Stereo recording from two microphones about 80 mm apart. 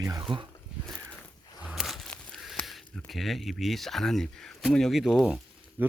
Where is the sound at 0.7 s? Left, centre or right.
Centre.